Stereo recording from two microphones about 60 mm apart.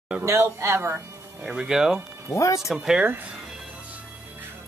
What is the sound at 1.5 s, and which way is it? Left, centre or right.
Speech, centre.